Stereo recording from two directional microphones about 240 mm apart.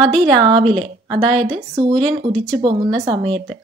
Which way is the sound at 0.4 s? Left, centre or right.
Centre.